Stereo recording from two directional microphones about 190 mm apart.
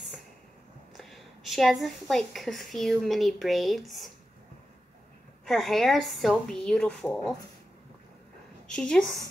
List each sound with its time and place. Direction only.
0.9 s a woman's voice: centre (ahead or behind)
5.4 s a woman's voice: centre (ahead or behind)
8.6 s a woman's voice: 5° left (ahead or behind)